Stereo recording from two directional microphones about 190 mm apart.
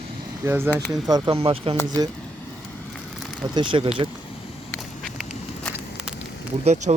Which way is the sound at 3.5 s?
25° right (ahead or behind).